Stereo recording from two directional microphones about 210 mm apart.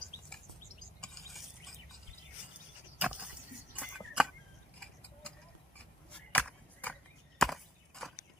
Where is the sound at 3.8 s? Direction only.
5° right (ahead or behind).